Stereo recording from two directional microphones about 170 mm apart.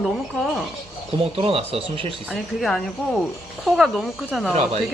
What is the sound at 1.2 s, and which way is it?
Speech, 35° right (ahead or behind).